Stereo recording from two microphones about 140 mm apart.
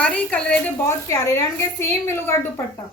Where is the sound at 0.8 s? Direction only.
20° left (ahead or behind).